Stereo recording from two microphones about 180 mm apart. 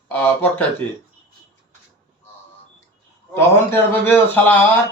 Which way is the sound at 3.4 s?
10° left (ahead or behind).